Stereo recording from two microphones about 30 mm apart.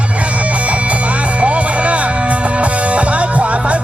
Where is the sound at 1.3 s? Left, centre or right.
Right.